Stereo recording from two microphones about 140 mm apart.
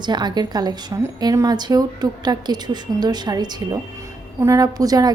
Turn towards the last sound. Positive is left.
turn(degrees=-25)  # may be behind; listen again after turning